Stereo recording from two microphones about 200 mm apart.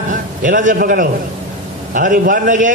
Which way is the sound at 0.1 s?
40° right (ahead or behind).